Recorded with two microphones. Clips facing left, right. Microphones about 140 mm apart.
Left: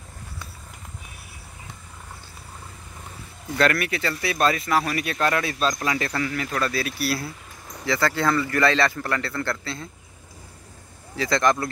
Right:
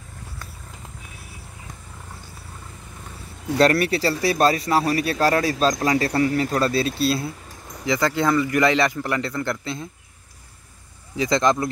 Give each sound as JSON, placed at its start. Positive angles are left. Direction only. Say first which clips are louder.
{"t": 3.5, "sound": "a man's voice", "louder": "right 5 dB", "side_deg": -35}
{"t": 11.1, "sound": "a man's voice", "louder": "right 2 dB", "side_deg": -20}